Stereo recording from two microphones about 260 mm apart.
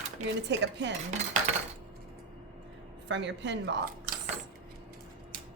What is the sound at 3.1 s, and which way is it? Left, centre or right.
A woman's voice, right.